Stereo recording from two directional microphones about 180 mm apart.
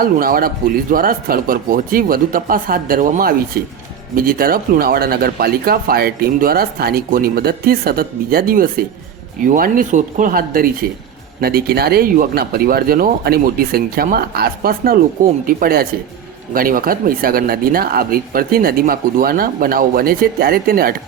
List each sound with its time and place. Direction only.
0.0 s speech: 55° right (ahead or behind)